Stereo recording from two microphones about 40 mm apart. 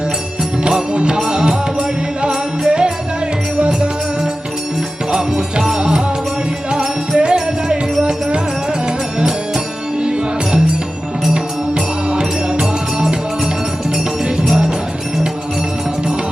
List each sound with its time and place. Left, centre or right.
0.7 s music: right
5.1 s music: centre
7.2 s music: centre
10.0 s music: right
11.7 s music: right
14.4 s jingle bell: centre